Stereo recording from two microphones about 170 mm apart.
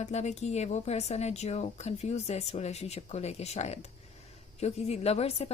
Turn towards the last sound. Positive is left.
turn(degrees=35)  # may be behind; listen again after turning